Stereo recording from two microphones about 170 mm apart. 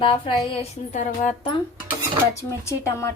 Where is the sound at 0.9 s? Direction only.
45° left (ahead or behind).